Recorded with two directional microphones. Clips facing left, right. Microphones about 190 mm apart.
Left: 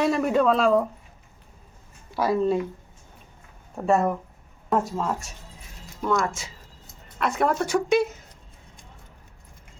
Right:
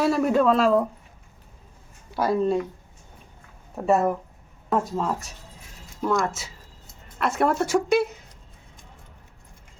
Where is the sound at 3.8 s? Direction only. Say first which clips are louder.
Right 1 dB; 5° right (ahead or behind).